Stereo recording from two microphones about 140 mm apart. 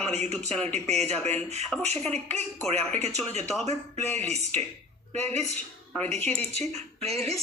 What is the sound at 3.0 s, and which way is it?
Speech, 50° right (ahead or behind).